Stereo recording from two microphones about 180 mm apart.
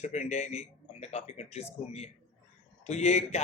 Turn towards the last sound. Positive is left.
turn(degrees=40)  # may be behind; listen again after turning